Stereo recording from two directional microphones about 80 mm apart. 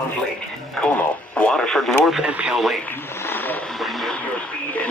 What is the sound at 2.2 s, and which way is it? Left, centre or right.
Speech, centre.